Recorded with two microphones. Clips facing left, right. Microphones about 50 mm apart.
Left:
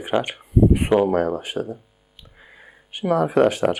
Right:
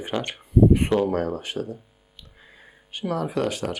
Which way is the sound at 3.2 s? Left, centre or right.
Left.